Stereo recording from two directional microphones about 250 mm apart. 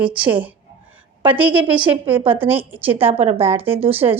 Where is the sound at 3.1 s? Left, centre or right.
Right.